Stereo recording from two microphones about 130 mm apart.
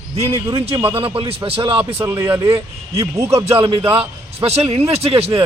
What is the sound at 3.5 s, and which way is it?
Speech, 45° right (ahead or behind).